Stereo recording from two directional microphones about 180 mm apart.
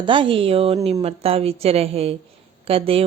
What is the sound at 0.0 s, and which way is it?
A woman's voice, 30° right (ahead or behind).